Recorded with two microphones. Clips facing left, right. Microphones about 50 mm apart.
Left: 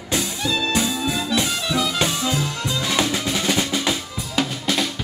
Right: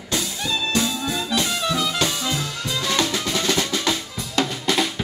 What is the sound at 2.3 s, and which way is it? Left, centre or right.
Drum, centre.